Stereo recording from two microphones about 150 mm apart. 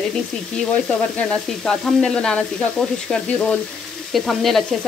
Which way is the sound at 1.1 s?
5° left (ahead or behind).